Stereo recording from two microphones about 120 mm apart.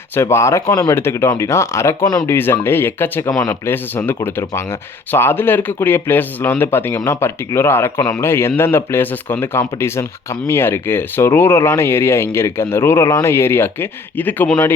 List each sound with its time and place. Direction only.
0.1 s speech: 20° left (ahead or behind)